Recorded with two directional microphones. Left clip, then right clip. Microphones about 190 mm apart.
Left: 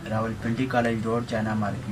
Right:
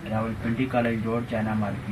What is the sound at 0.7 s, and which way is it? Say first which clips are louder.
Speech: left 2 dB; 15° left (ahead or behind).